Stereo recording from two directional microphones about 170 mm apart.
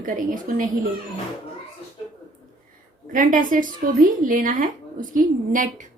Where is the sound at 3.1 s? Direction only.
50° right (ahead or behind).